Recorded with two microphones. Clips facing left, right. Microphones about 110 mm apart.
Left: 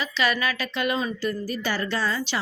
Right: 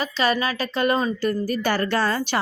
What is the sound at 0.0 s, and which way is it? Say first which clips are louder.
Speech: right 3 dB; 40° right (ahead or behind).